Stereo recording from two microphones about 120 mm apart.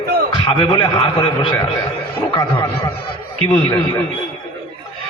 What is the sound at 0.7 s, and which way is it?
Speech, 40° left (ahead or behind).